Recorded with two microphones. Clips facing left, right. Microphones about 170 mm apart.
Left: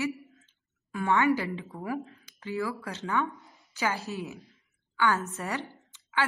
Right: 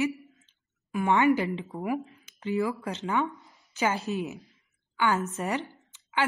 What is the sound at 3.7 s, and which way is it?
A woman's voice, 20° right (ahead or behind).